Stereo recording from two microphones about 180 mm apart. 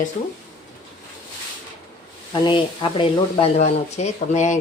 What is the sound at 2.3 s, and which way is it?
Speech, 25° left (ahead or behind).